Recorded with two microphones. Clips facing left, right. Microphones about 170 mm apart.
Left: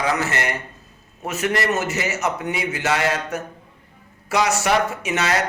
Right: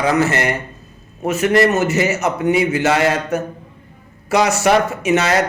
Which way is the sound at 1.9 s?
20° right (ahead or behind).